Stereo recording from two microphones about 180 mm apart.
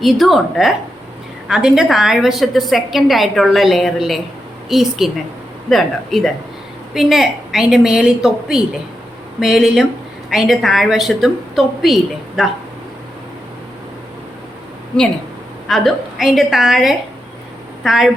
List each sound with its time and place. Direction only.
0.0 s a woman's voice: centre (ahead or behind)
15.6 s a woman's voice: centre (ahead or behind)